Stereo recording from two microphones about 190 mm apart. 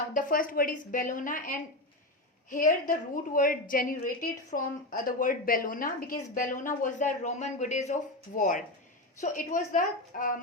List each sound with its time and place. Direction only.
0.1 s a woman's voice: 45° left (ahead or behind)